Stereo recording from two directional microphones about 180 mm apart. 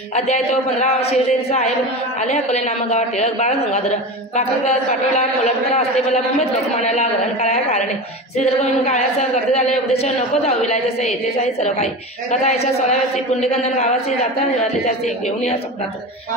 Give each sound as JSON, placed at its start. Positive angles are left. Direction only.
{"t": 0.1, "sound": "a woman's voice", "side_deg": 40}
{"t": 4.6, "sound": "a woman's voice", "side_deg": 40}
{"t": 9.5, "sound": "a woman's voice", "side_deg": 35}